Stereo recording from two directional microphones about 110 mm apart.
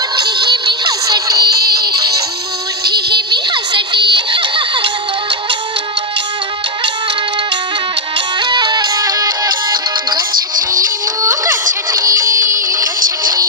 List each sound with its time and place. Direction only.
0.2 s synthetic singing: 40° right (ahead or behind)
8.4 s music: 40° right (ahead or behind)
10.7 s music: 30° right (ahead or behind)